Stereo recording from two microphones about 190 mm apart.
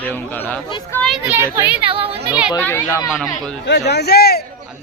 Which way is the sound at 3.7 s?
65° left (ahead or behind).